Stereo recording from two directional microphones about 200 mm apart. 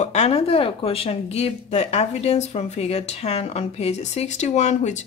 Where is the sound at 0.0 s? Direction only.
35° left (ahead or behind).